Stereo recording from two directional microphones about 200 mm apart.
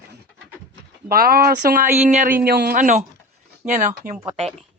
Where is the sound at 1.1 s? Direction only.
45° right (ahead or behind).